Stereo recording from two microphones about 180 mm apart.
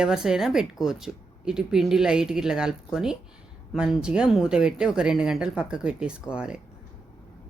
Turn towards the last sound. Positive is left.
turn(degrees=-5)  # may be behind; listen again after turning